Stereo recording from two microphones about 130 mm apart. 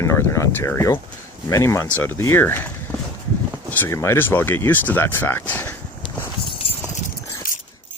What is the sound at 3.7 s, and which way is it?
Speech, 15° left (ahead or behind).